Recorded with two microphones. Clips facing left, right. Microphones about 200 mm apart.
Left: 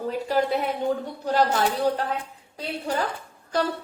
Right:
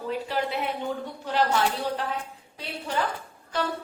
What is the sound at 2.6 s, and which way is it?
Speech, 40° left (ahead or behind).